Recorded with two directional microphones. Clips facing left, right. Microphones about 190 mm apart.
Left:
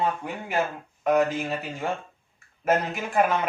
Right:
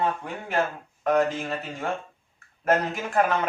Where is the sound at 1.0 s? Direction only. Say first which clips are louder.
Left 1 dB; 5° left (ahead or behind).